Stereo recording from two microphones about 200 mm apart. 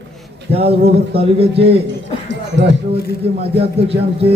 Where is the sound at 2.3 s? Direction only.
65° right (ahead or behind).